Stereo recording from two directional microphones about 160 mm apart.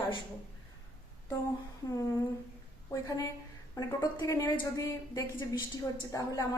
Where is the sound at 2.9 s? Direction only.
20° left (ahead or behind).